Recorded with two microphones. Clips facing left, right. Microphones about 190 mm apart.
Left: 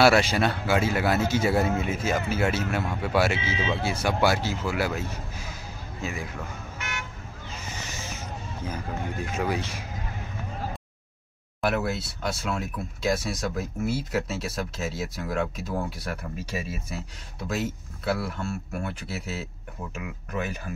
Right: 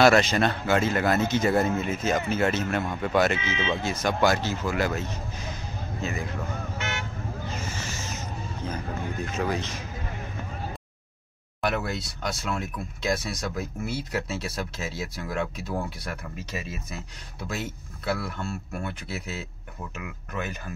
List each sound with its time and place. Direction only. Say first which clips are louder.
0.0 s speech: right 1 dB; 10° left (ahead or behind)
3.3 s speech: even; 30° left (ahead or behind)
3.7 s speech: even; 10° left (ahead or behind)
6.8 s vehicle: right 1 dB; 25° right (ahead or behind)
7.6 s a sound: right 3 dB; 15° left (ahead or behind)
9.2 s speech: even; 10° left (ahead or behind)
11.6 s speech: left 2 dB; 5° left (ahead or behind)